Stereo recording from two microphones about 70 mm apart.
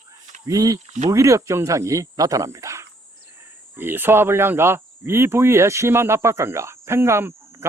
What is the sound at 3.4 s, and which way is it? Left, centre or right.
Speech, right.